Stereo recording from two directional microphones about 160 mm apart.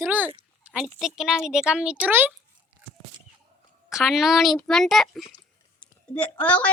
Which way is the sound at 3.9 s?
Centre (ahead or behind).